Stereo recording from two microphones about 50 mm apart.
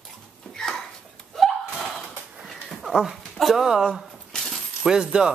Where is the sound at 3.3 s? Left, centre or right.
Centre.